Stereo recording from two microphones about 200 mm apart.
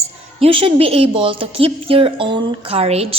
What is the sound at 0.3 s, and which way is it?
A woman's voice, 30° right (ahead or behind).